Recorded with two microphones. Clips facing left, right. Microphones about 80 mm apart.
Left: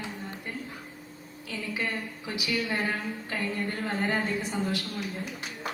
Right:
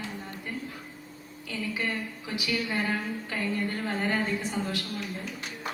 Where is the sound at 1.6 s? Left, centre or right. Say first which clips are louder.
Right 1 dB; left.